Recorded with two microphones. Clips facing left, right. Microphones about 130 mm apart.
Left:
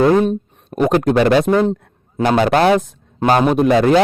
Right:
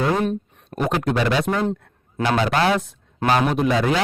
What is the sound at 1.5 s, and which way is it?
Speech, 25° left (ahead or behind).